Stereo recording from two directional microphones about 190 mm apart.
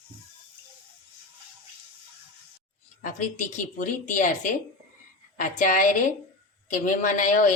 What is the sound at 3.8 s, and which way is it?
Speech, 45° left (ahead or behind).